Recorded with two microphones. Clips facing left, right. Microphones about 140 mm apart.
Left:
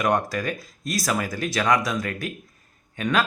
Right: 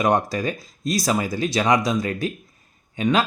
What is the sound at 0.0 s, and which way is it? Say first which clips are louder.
Speech: right 3 dB; 25° right (ahead or behind).